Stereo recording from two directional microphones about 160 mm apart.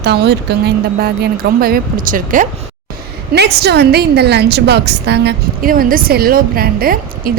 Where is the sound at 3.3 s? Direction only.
90° right.